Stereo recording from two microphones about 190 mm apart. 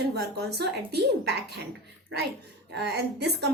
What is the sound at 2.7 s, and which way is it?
Speech, 60° right (ahead or behind).